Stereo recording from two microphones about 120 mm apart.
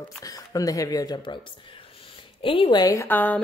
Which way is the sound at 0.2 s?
30° left (ahead or behind).